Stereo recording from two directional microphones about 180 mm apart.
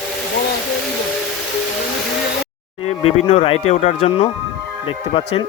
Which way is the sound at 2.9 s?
35° left (ahead or behind).